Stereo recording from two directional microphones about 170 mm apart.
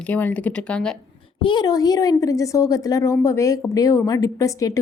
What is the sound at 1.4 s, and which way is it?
Speech, 25° left (ahead or behind).